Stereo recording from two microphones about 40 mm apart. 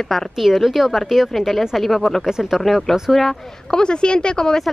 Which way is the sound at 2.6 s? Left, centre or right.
Centre.